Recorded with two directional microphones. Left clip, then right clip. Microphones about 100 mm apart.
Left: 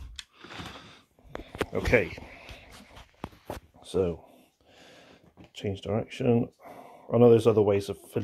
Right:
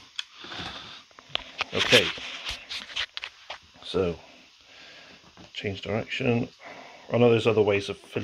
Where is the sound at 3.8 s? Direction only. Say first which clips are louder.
Right 1 dB; 30° left (ahead or behind).